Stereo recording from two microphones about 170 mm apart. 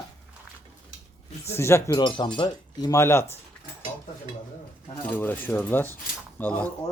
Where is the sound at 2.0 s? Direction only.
30° left (ahead or behind).